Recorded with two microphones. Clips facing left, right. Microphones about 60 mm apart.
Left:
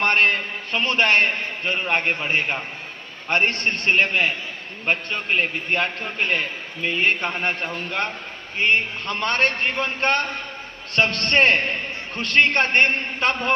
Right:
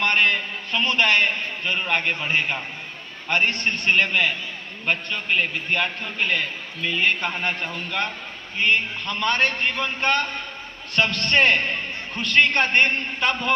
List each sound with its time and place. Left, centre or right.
0.0 s a man's voice: left
1.9 s a man's voice: left
3.2 s a man's voice: left